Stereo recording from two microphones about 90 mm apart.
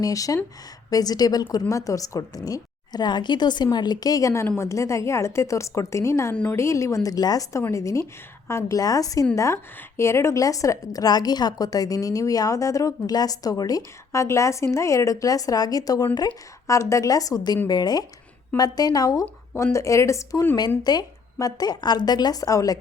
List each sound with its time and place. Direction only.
0.0 s a woman's voice: 40° left (ahead or behind)
6.3 s a woman's voice: 15° left (ahead or behind)
6.6 s a woman's voice: 35° left (ahead or behind)
8.8 s a woman's voice: 40° left (ahead or behind)
19.5 s a woman's voice: 35° left (ahead or behind)
20.6 s a woman's voice: 50° left (ahead or behind)